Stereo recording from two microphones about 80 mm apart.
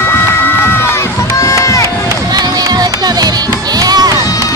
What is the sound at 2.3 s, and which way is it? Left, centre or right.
Run, right.